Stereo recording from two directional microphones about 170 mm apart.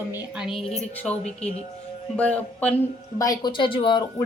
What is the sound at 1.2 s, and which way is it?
Speech, 40° left (ahead or behind).